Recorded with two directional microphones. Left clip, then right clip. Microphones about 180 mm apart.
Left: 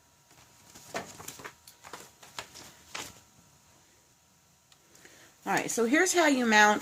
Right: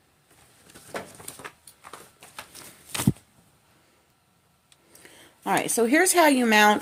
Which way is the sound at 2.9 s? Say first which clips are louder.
Right 11 dB; 55° right (ahead or behind).